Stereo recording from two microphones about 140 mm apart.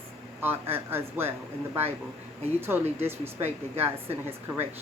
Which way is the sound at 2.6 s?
15° right (ahead or behind).